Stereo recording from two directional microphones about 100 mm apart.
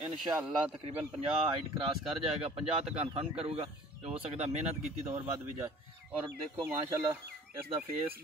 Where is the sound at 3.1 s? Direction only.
70° right (ahead or behind); by 5.2 s 90° right.